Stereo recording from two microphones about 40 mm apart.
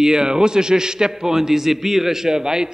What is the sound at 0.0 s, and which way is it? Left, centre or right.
A man's voice, centre.